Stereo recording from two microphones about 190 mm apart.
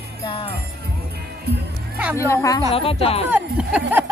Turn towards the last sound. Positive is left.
turn(degrees=-5)  # may be behind; listen again after turning